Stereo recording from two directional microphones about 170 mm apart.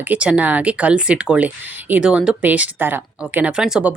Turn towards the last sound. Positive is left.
turn(degrees=-5)  # may be behind; listen again after turning